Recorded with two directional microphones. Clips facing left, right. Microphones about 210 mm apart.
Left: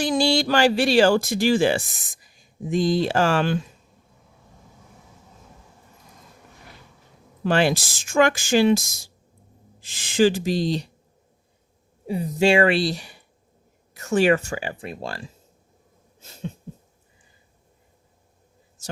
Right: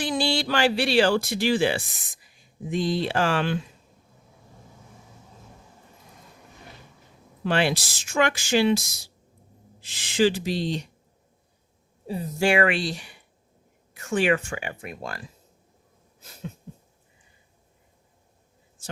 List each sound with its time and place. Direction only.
0.0 s speech: 45° left (ahead or behind)
7.4 s speech: 45° left (ahead or behind)
12.0 s speech: 15° left (ahead or behind); by 15.3 s 30° left (ahead or behind)
16.2 s a sound: 25° left (ahead or behind)